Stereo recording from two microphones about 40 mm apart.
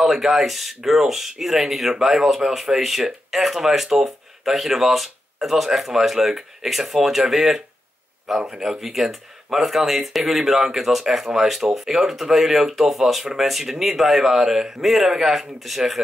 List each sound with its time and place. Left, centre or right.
0.0 s speech: centre